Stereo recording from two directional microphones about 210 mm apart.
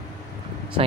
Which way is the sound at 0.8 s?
25° right (ahead or behind).